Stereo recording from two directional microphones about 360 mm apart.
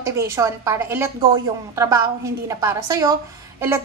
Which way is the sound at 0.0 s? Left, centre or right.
Centre.